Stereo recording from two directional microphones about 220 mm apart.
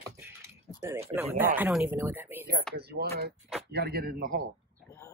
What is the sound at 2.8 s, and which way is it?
Speech, 45° right (ahead or behind).